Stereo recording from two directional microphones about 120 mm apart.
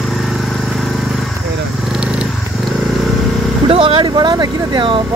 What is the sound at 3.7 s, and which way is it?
Speech, 50° right (ahead or behind).